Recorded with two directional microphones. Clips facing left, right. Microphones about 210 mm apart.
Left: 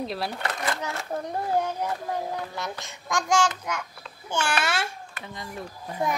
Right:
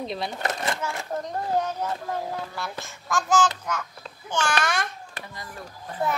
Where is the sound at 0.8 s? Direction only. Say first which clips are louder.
Right 1 dB; 15° left (ahead or behind).